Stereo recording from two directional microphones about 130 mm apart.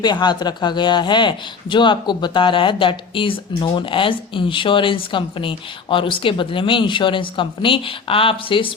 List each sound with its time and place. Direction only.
0.0 s speech: 35° left (ahead or behind)